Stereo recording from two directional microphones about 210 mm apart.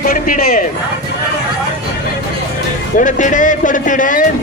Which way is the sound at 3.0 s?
35° left (ahead or behind).